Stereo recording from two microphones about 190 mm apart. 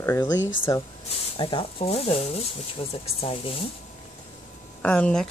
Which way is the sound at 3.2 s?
30° left (ahead or behind).